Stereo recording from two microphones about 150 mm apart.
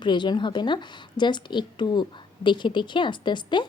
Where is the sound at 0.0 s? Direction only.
30° left (ahead or behind).